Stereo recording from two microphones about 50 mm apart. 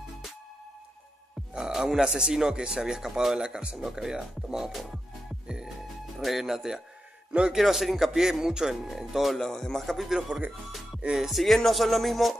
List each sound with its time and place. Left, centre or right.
1.5 s speech: centre
6.1 s a man's voice: centre
10.0 s speech: centre
11.0 s music: centre
11.2 s a man's voice: centre